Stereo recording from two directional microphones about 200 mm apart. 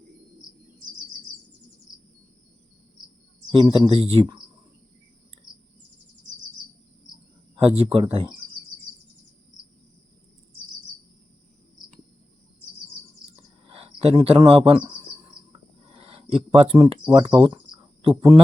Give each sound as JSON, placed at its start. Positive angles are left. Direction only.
{"t": 3.5, "sound": "speech", "side_deg": -25}
{"t": 7.5, "sound": "speech", "side_deg": -30}
{"t": 13.3, "sound": "bird", "side_deg": -30}
{"t": 15.5, "sound": "a sound", "side_deg": -30}
{"t": 17.4, "sound": "cricket", "side_deg": -25}
{"t": 18.1, "sound": "speech", "side_deg": -10}